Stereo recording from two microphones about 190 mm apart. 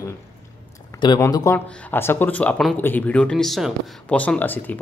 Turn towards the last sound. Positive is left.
turn(degrees=10)  # may be behind; listen again after turning